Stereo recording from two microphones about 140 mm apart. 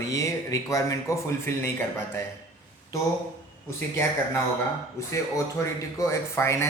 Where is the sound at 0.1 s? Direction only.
25° left (ahead or behind).